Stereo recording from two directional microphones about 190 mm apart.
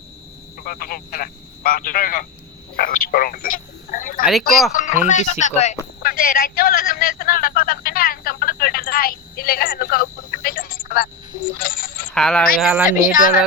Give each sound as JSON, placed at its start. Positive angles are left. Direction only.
{"t": 0.6, "sound": "speech", "side_deg": 50}
{"t": 12.1, "sound": "speech", "side_deg": 5}
{"t": 12.9, "sound": "speech", "side_deg": 45}